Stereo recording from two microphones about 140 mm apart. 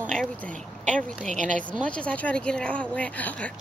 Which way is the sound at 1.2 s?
60° right (ahead or behind).